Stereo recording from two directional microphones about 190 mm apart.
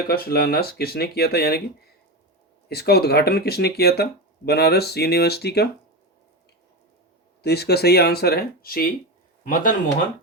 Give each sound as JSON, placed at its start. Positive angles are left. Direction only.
{"t": 0.1, "sound": "speech", "side_deg": 55}
{"t": 2.6, "sound": "speech", "side_deg": 55}
{"t": 7.4, "sound": "speech", "side_deg": 60}